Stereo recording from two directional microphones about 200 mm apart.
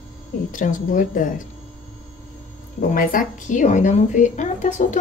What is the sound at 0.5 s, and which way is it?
Speech, 40° left (ahead or behind).